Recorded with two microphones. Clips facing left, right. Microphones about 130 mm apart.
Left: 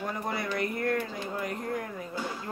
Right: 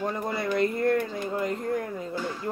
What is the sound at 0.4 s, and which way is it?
Speech, 25° right (ahead or behind).